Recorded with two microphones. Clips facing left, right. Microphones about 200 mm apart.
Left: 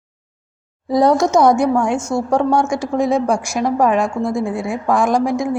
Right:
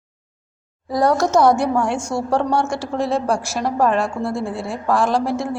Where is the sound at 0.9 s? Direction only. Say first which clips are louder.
Left 4 dB; 20° left (ahead or behind).